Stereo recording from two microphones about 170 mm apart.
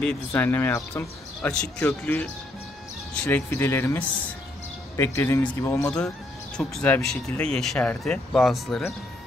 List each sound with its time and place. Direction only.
0.0 s speech: 10° left (ahead or behind)
5.9 s speech: 5° left (ahead or behind)